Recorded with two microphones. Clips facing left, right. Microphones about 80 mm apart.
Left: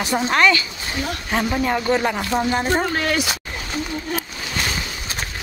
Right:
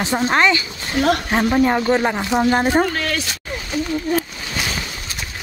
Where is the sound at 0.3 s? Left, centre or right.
Right.